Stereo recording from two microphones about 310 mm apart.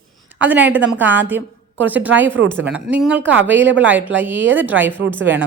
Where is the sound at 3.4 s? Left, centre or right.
Right.